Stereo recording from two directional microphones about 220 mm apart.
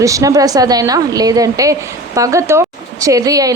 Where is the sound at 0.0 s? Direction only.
15° right (ahead or behind).